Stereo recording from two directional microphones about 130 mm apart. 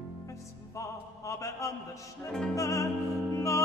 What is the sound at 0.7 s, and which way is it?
Music, 25° left (ahead or behind).